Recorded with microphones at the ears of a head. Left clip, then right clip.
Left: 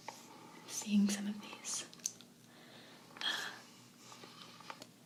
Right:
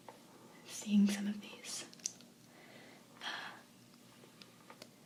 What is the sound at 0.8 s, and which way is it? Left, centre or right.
Whispering, centre.